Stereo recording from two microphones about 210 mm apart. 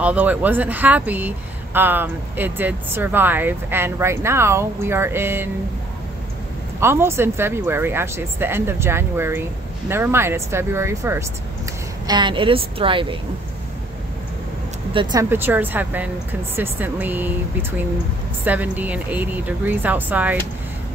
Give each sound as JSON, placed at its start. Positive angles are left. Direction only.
{"t": 0.0, "sound": "speech", "side_deg": -5}
{"t": 6.8, "sound": "a woman's voice", "side_deg": -10}
{"t": 15.0, "sound": "speech", "side_deg": -15}